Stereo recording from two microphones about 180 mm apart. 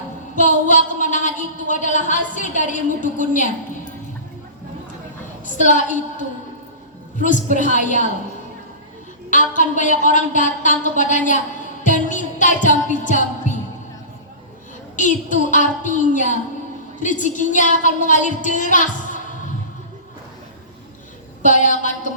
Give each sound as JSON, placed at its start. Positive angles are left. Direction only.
{"t": 0.3, "sound": "a woman's voice", "side_deg": 45}
{"t": 5.5, "sound": "a woman's voice", "side_deg": 45}
{"t": 7.5, "sound": "a woman's voice", "side_deg": 45}
{"t": 9.6, "sound": "a woman's voice", "side_deg": 45}
{"t": 11.8, "sound": "music", "side_deg": 45}
{"t": 12.6, "sound": "a woman's voice", "side_deg": 45}
{"t": 13.5, "sound": "a sound", "side_deg": 45}
{"t": 14.9, "sound": "a woman's voice", "side_deg": 45}
{"t": 21.4, "sound": "a woman's voice", "side_deg": 45}